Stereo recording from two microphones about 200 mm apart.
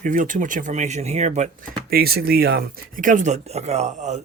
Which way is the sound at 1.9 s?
50° right (ahead or behind).